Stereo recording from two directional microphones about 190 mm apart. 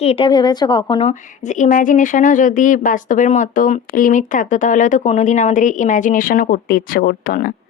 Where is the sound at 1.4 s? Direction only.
40° left (ahead or behind).